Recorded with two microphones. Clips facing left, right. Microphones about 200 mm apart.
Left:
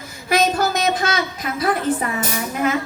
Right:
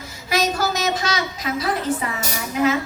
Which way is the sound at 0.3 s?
55° left (ahead or behind).